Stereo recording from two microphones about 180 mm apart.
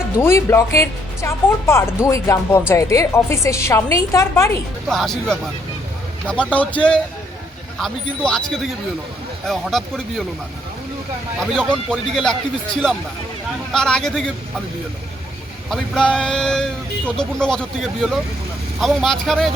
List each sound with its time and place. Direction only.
0.2 s speech: 15° left (ahead or behind)
4.9 s a man's voice: centre (ahead or behind)
7.8 s a man's voice: 5° left (ahead or behind)
11.3 s a man's voice: 5° left (ahead or behind)
15.7 s a man's voice: 5° left (ahead or behind)
18.8 s a man's voice: centre (ahead or behind)